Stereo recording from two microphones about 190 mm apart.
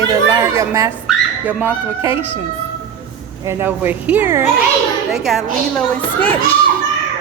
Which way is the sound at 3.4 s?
10° right (ahead or behind).